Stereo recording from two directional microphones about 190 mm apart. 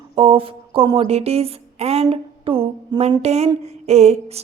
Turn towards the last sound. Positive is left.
turn(degrees=-35)  # may be behind; listen again after turning